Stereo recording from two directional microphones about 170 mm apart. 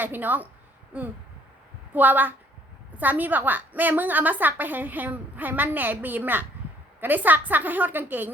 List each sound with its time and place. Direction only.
0.0 s a woman's voice: 10° right (ahead or behind)
1.9 s a woman's voice: 10° right (ahead or behind)